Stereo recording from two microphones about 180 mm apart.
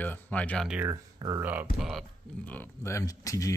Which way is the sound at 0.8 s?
20° right (ahead or behind).